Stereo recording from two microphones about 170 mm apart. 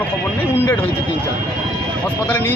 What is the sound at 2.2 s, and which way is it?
Speech, 10° left (ahead or behind).